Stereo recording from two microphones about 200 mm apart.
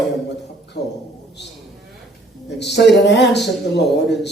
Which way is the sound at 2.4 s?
60° left (ahead or behind).